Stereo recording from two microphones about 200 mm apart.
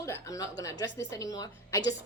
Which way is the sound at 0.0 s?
15° left (ahead or behind).